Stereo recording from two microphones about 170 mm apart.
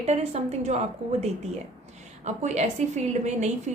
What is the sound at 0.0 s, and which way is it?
Speech, 40° right (ahead or behind).